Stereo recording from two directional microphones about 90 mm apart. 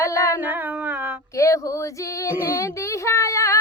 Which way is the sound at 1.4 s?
35° left (ahead or behind).